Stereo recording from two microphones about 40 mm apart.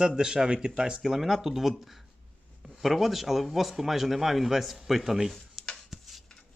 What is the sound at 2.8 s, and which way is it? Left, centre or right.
A man's voice, centre.